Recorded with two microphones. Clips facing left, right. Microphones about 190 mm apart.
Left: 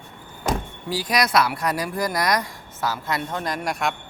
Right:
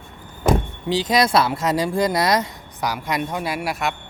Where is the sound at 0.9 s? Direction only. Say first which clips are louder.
Right 4 dB; 20° right (ahead or behind); by 3.9 s 5° right (ahead or behind).